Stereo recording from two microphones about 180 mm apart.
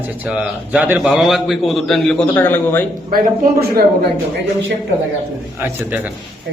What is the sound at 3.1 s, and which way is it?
Speech, 55° right (ahead or behind).